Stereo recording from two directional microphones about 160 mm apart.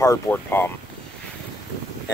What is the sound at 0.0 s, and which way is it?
Speech, 15° left (ahead or behind).